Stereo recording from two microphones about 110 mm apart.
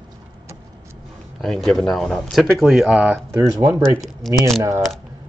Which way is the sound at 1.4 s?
5° left (ahead or behind).